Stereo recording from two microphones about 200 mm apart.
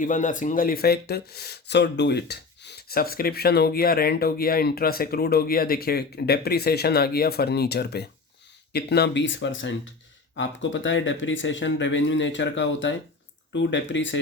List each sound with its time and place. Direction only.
0.0 s speech: 40° left (ahead or behind); by 14.2 s 65° left (ahead or behind)